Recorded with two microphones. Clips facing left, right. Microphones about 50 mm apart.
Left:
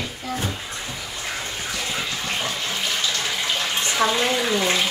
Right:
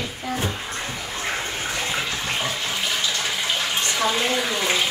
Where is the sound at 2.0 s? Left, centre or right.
Centre.